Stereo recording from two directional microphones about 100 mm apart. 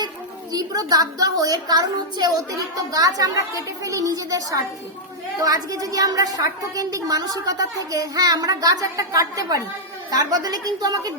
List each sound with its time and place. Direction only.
0.5 s a woman's voice: 40° right (ahead or behind)